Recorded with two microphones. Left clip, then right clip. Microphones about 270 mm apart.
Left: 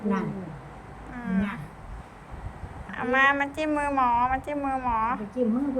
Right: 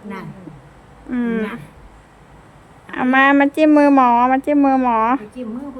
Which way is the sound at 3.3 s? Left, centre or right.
Centre.